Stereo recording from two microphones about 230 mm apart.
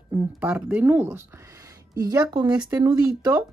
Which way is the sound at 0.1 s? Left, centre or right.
Centre.